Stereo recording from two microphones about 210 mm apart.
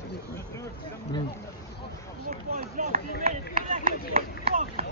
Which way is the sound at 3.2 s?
40° right (ahead or behind).